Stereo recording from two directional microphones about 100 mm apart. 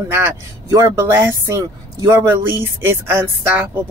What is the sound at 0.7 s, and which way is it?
Speech, 30° right (ahead or behind).